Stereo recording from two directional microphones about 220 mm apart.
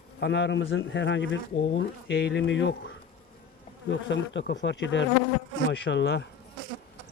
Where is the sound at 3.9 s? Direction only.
55° left (ahead or behind).